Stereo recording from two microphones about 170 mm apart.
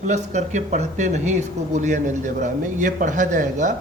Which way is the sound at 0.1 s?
45° right (ahead or behind).